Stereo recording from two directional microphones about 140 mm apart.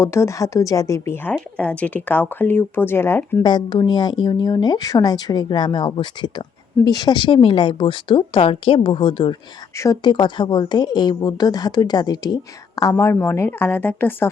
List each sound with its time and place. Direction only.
0.0 s a woman's voice: 20° left (ahead or behind)
3.4 s a woman's voice: 30° left (ahead or behind)
9.7 s a woman's voice: 25° left (ahead or behind)